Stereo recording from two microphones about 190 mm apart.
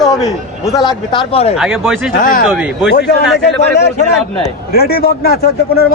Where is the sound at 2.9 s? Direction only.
60° left (ahead or behind).